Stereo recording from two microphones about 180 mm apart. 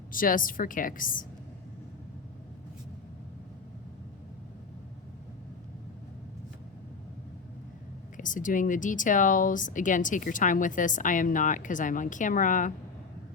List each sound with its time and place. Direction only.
0.1 s speech: 50° left (ahead or behind)
8.1 s speech: 45° left (ahead or behind)